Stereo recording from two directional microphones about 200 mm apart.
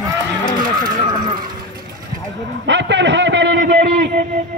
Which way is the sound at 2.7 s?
60° right (ahead or behind).